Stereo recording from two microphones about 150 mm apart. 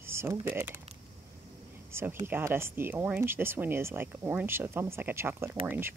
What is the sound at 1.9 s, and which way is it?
Speech, 15° right (ahead or behind).